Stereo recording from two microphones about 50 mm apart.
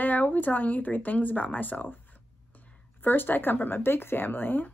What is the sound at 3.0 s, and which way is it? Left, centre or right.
Speech, left.